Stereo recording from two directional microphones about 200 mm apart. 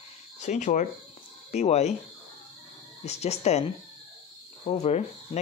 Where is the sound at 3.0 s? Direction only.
30° left (ahead or behind).